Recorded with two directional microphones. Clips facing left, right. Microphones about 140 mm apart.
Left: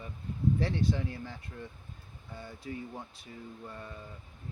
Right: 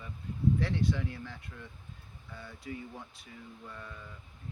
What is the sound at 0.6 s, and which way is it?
Speech, 30° left (ahead or behind).